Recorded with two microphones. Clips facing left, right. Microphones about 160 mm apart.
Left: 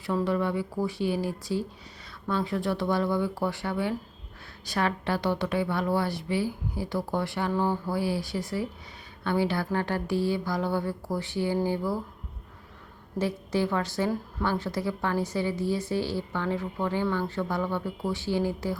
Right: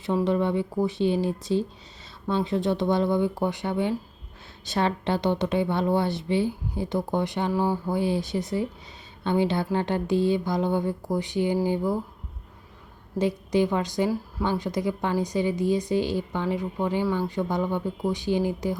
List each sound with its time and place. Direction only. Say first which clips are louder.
0.0 s a woman's voice: right 3 dB; 20° right (ahead or behind)
13.1 s a woman's voice: right 4 dB; 15° right (ahead or behind)